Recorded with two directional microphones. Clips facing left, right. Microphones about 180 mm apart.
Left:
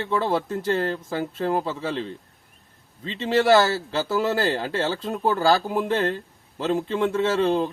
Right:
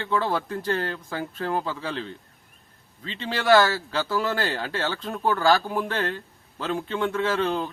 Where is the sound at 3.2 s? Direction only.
25° left (ahead or behind).